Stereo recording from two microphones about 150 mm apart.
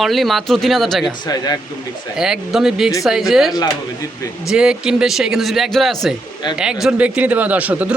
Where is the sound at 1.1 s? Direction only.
25° left (ahead or behind).